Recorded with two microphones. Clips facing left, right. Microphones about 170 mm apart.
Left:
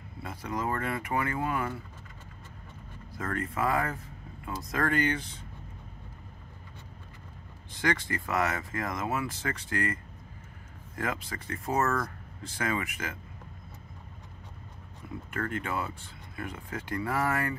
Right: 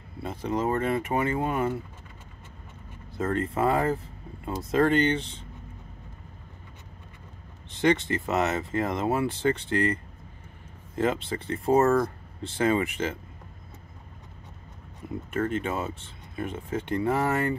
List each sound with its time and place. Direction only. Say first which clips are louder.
0.2 s speech: right 6 dB; 25° right (ahead or behind)
3.2 s speech: right 6 dB; 25° right (ahead or behind)
7.7 s speech: right 7 dB; 25° right (ahead or behind)
11.0 s speech: right 8 dB; 25° right (ahead or behind)
15.0 s a sound: right 6 dB; 25° right (ahead or behind)
15.3 s speech: right 5 dB; 20° right (ahead or behind)